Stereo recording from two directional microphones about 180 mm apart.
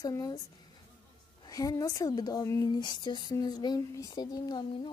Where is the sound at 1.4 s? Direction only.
20° left (ahead or behind).